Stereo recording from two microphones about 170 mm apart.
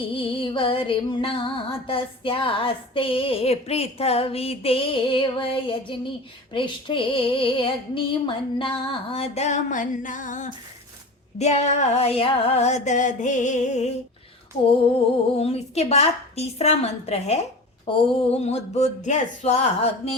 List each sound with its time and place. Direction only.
0.1 s music: 30° left (ahead or behind)
14.9 s music: 35° left (ahead or behind)